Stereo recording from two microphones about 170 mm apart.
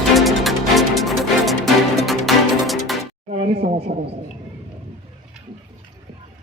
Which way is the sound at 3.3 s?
35° right (ahead or behind).